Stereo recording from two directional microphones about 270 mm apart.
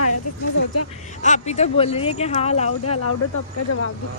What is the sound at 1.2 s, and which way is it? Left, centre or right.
Speech, left.